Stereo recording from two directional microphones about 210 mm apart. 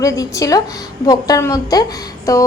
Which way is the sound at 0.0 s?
15° left (ahead or behind).